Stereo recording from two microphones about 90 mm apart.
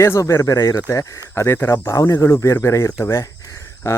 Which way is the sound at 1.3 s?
25° left (ahead or behind).